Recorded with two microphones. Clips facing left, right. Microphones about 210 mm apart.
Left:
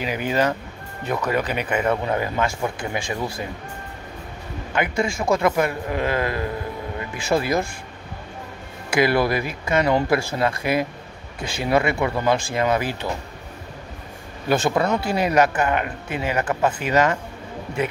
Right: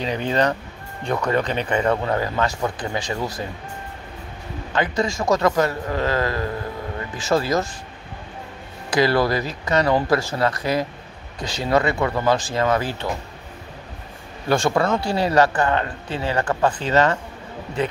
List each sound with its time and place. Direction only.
0.3 s a man's voice: 5° left (ahead or behind)
4.7 s a man's voice: 10° left (ahead or behind)
8.9 s a man's voice: 20° left (ahead or behind)
14.5 s a man's voice: 20° left (ahead or behind)